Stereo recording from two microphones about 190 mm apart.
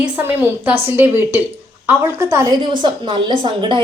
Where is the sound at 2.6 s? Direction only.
25° right (ahead or behind).